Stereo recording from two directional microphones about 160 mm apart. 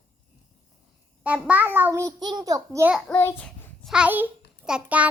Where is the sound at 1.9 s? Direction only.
25° right (ahead or behind).